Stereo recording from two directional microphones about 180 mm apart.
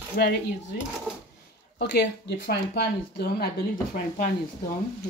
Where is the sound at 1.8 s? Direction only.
70° left (ahead or behind).